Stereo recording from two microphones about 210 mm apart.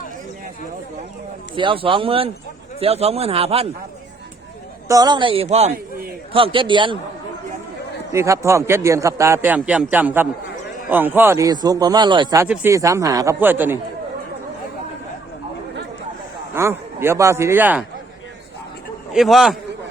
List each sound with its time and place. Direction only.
1.5 s a man's voice: 25° right (ahead or behind)
4.9 s a man's voice: 20° right (ahead or behind)
8.1 s a man's voice: 15° right (ahead or behind)
16.6 s a man's voice: 10° right (ahead or behind)
19.1 s a man's voice: centre (ahead or behind)